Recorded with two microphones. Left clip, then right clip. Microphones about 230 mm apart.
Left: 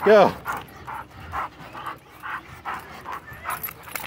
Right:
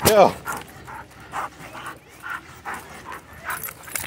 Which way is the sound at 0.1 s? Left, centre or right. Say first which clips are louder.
Left 1 dB; centre.